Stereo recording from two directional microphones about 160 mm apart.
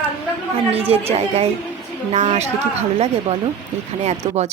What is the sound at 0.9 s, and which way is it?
A woman's voice, 40° right (ahead or behind).